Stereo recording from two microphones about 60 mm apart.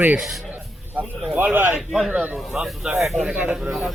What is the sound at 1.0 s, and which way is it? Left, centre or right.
Speech, right.